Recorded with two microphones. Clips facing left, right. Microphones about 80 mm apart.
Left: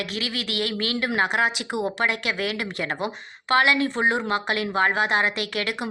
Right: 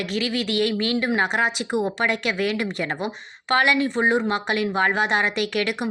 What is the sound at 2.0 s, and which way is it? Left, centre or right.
A woman's voice, right.